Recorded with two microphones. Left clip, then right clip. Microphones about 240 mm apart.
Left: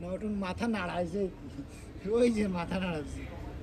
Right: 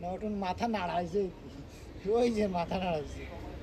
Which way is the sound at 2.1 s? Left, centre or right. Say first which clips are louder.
Left 1 dB; centre.